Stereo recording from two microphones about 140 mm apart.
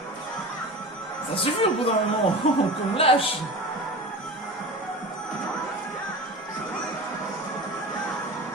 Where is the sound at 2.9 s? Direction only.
40° left (ahead or behind).